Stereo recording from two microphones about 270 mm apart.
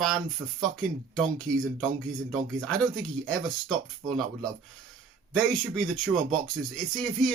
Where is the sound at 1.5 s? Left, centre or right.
Right.